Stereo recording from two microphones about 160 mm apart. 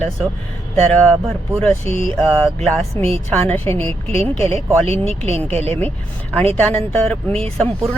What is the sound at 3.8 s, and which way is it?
Speech, 35° right (ahead or behind).